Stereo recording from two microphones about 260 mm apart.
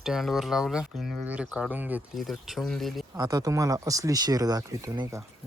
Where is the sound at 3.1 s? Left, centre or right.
Centre.